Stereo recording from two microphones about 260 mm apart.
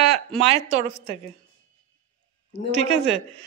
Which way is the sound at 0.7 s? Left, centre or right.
Right.